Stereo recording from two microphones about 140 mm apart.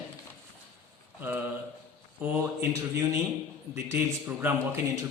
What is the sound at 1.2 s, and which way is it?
A man's voice, 15° right (ahead or behind).